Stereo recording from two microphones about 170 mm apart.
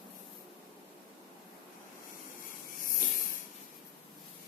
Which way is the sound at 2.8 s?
55° left (ahead or behind).